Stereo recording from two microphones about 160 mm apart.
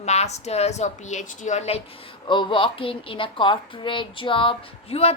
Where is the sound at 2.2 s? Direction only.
30° left (ahead or behind).